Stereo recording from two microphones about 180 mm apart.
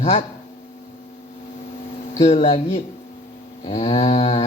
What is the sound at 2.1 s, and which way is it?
Speech, 35° left (ahead or behind).